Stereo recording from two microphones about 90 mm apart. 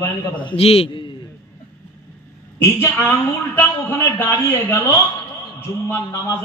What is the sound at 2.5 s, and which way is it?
A woman's voice, 25° left (ahead or behind).